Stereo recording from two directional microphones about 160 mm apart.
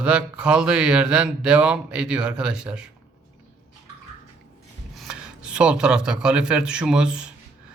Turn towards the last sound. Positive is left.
turn(degrees=-5)  # may be behind; listen again after turning